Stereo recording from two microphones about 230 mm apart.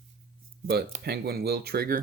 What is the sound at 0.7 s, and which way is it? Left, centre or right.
Speech, right.